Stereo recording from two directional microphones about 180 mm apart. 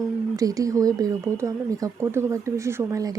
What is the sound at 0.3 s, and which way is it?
Speech, 20° right (ahead or behind).